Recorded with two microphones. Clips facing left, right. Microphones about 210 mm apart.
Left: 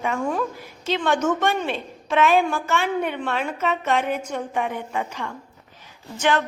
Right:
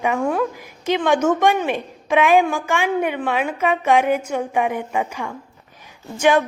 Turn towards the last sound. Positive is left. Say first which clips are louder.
# right 5 dB
turn(degrees=-10)  # may be behind; listen again after turning